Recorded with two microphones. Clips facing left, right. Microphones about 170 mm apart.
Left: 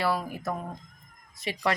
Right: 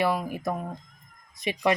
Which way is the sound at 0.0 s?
15° right (ahead or behind).